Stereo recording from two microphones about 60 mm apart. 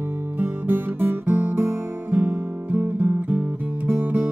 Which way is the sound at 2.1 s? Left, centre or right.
Right.